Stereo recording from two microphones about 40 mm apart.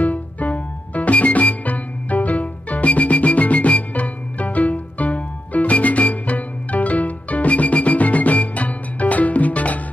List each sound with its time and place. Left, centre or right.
0.0 s music: left